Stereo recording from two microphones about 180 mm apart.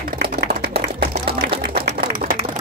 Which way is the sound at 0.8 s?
60° right (ahead or behind).